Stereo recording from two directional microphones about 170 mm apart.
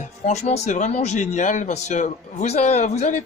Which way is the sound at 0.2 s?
40° left (ahead or behind).